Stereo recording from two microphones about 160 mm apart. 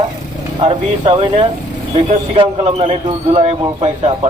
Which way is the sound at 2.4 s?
40° right (ahead or behind).